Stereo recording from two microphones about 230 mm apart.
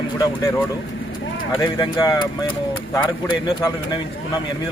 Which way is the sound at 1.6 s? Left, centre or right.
Centre.